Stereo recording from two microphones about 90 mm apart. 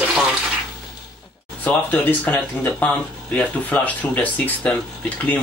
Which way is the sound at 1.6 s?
20° left (ahead or behind).